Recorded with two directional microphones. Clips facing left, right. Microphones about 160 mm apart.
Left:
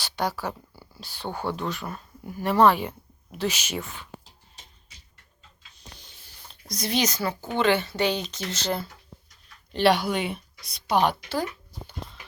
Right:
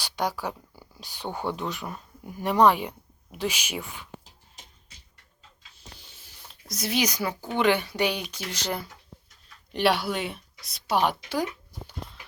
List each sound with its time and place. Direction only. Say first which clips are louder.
0.0 s a sound: even; 10° right (ahead or behind)
0.4 s speech: left 1 dB; 5° left (ahead or behind)
0.9 s speech: left 1 dB; 15° right (ahead or behind)
1.3 s a woman's voice: even; centre (ahead or behind)
1.5 s speech: left 1 dB; 15° right (ahead or behind)
6.5 s a woman's voice: left 1 dB; 5° right (ahead or behind)